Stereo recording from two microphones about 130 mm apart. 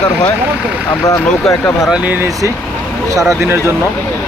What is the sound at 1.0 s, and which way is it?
Speech, 25° left (ahead or behind).